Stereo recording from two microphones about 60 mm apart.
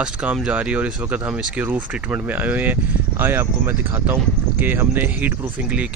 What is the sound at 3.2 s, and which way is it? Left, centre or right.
Speech, right.